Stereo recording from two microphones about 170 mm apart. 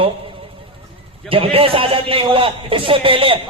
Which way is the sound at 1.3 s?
30° right (ahead or behind).